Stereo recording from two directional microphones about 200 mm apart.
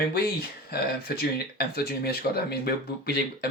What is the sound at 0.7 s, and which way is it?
Speech, 55° left (ahead or behind).